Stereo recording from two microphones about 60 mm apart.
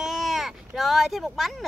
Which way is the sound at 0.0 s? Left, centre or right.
Centre.